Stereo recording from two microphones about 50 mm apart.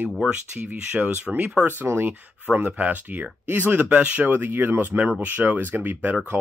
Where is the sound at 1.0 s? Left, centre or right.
Right.